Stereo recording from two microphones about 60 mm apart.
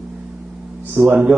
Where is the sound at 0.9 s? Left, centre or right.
Right.